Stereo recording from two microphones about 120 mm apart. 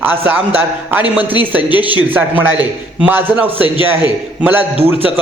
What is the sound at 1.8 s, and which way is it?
A man's voice, 15° right (ahead or behind).